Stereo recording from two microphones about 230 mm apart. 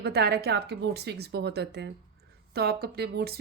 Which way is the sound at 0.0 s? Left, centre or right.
Right.